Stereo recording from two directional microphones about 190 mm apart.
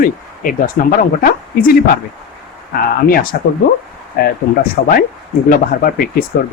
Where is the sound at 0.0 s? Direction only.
50° left (ahead or behind).